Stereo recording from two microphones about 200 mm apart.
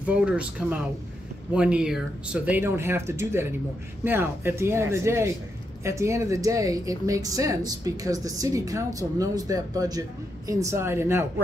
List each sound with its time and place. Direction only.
0.0 s speech: 5° right (ahead or behind)